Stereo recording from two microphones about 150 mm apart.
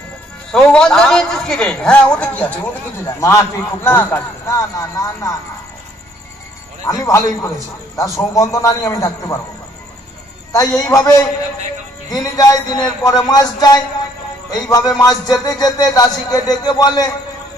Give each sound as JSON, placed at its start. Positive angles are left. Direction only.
{"t": 0.5, "sound": "a man's voice", "side_deg": 5}
{"t": 6.9, "sound": "music", "side_deg": 20}
{"t": 10.5, "sound": "music", "side_deg": 25}